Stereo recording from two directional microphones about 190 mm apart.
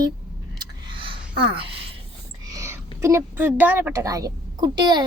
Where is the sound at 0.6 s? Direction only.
25° right (ahead or behind).